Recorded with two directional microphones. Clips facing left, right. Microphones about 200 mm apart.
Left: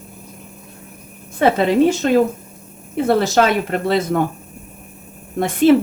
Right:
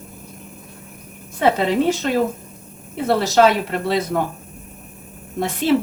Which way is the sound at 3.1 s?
50° left (ahead or behind).